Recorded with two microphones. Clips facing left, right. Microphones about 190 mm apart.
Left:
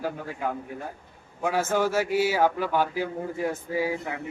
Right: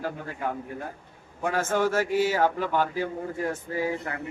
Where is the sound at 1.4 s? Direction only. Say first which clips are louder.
Left 1 dB; 5° left (ahead or behind).